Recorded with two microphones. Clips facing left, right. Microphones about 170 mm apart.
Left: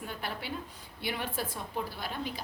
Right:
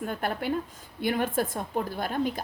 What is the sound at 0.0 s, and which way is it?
A woman's voice, 50° right (ahead or behind).